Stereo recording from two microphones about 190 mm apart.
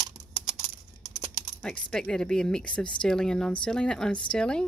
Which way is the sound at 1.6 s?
5° left (ahead or behind).